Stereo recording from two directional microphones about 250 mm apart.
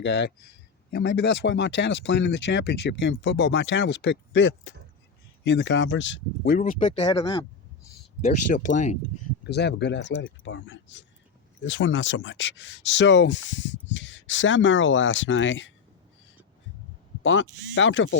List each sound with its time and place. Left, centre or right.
0.0 s speech: left; by 7.4 s centre
8.2 s speech: left
9.4 s speech: left
17.2 s speech: left